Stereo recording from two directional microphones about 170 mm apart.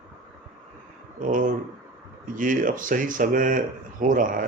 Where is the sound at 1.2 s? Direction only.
50° right (ahead or behind).